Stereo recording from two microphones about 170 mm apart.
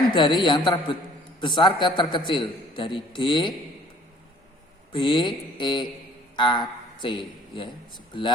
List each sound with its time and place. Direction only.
0.1 s a man's voice: 25° left (ahead or behind)
4.9 s a man's voice: 30° left (ahead or behind)